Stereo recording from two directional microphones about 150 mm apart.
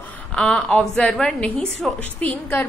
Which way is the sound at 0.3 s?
5° left (ahead or behind).